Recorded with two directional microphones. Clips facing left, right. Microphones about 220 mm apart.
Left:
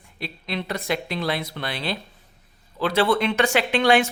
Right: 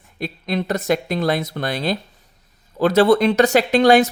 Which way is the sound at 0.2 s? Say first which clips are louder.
Right 7 dB; 45° right (ahead or behind).